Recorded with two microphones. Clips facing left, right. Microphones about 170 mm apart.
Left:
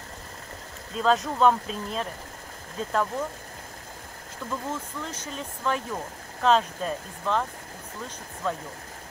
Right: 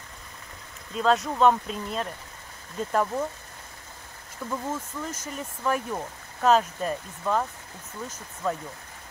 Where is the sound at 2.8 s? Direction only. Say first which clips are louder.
Right 1 dB; 10° right (ahead or behind).